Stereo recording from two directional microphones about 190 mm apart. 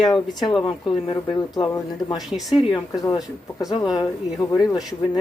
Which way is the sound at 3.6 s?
20° left (ahead or behind).